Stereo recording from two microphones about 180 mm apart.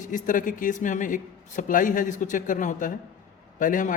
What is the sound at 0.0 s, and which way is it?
Speech, 45° left (ahead or behind).